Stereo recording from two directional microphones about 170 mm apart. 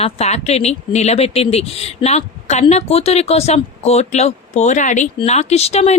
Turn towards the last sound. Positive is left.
turn(degrees=40)  # may be behind; listen again after turning